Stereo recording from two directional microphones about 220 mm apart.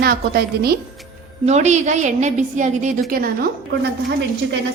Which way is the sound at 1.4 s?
30° right (ahead or behind).